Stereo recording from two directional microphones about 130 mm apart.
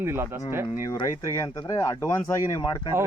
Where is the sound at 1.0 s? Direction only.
30° left (ahead or behind).